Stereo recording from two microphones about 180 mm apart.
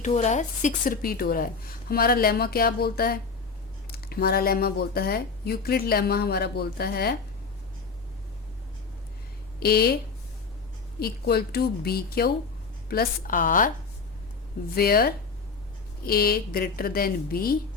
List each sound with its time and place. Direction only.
0.0 s a woman's voice: 40° left (ahead or behind); by 7.2 s 60° left (ahead or behind)
9.6 s speech: 60° left (ahead or behind)
11.0 s a woman's voice: 60° left (ahead or behind)
14.8 s speech: 60° left (ahead or behind)